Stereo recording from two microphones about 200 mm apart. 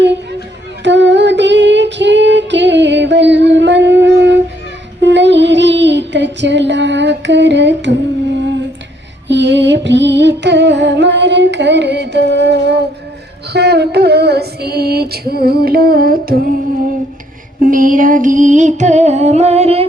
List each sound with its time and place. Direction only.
0.0 s a sound: 60° right (ahead or behind)
0.9 s female singing: 60° right (ahead or behind)
4.9 s child singing: 60° right (ahead or behind)
9.2 s a sound: 60° right (ahead or behind)
13.5 s female singing: 55° right (ahead or behind)
17.6 s music: 45° right (ahead or behind)